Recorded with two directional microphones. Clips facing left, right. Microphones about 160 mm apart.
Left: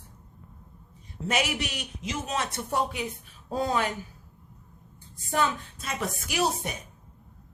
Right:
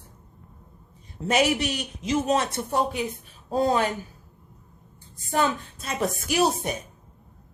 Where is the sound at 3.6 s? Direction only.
35° right (ahead or behind).